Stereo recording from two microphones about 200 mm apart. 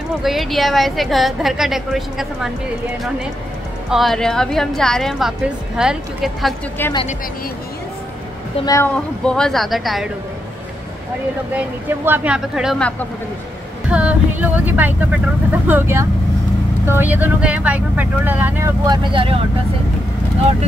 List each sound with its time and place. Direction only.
0.2 s a woman's voice: centre (ahead or behind)
3.9 s a woman's voice: centre (ahead or behind)
6.8 s speech: 10° left (ahead or behind)
8.5 s a woman's voice: 15° left (ahead or behind); by 10.0 s centre (ahead or behind)
11.5 s a woman's voice: 10° right (ahead or behind)
18.9 s speech: 25° right (ahead or behind)